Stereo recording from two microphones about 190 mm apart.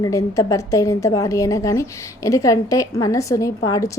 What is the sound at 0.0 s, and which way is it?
A woman's voice, 15° left (ahead or behind).